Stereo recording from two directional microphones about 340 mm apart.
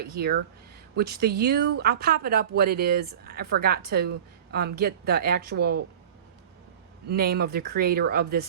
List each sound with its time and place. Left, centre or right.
0.0 s a woman's voice: right
7.1 s a woman's voice: right